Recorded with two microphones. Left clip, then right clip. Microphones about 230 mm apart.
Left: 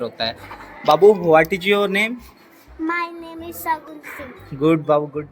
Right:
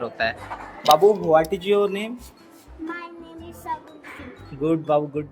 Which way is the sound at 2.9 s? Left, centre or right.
Left.